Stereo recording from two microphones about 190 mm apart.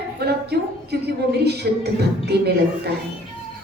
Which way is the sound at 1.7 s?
60° right (ahead or behind).